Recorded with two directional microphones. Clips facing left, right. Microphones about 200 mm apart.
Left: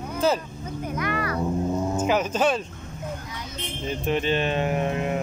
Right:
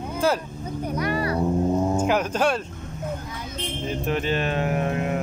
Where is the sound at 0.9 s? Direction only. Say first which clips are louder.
Right 3 dB; 35° right (ahead or behind).